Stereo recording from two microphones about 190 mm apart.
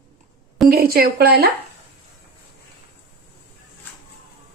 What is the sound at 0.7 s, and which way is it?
Speech, 55° right (ahead or behind).